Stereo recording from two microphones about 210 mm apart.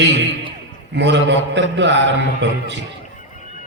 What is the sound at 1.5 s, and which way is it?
A man's voice, 60° right (ahead or behind).